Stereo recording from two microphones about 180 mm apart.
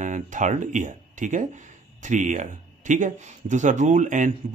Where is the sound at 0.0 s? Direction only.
45° right (ahead or behind).